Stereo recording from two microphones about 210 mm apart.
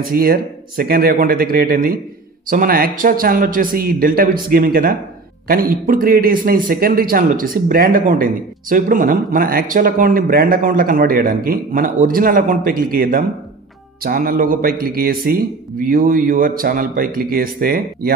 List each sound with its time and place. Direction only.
0.1 s a man's voice: 45° right (ahead or behind)